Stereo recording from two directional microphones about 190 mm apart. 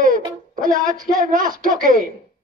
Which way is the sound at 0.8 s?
45° right (ahead or behind).